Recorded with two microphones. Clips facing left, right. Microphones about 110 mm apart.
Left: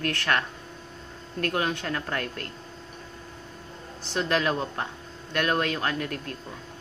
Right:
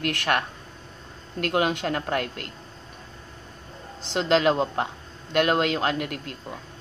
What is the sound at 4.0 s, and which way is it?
Speech, 20° right (ahead or behind).